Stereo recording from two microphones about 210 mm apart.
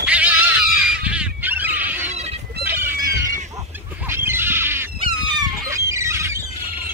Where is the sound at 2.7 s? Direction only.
10° right (ahead or behind).